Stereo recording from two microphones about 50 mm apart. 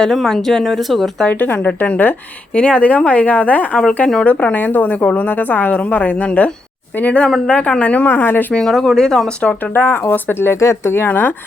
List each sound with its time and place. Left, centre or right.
0.1 s speech: centre
1.3 s a woman's voice: left
2.5 s a woman's voice: left
8.5 s speech: centre
9.4 s speech: left
9.7 s speech: left
10.6 s speech: left
10.9 s a woman's voice: left